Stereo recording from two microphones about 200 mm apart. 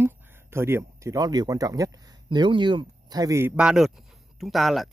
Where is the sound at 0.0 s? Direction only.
10° right (ahead or behind).